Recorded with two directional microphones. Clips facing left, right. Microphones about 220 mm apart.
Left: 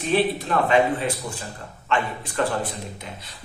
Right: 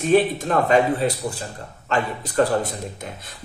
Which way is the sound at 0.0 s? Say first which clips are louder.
Right 4 dB; 45° right (ahead or behind).